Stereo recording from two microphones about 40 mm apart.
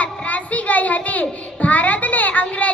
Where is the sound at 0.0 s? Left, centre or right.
Left.